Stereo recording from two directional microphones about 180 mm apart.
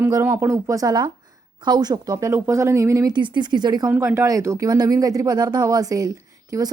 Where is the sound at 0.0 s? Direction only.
10° right (ahead or behind).